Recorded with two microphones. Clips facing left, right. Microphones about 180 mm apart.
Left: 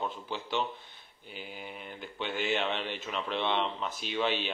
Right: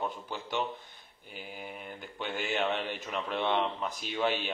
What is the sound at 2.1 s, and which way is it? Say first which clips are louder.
Speech: left 1 dB; 45° right (ahead or behind).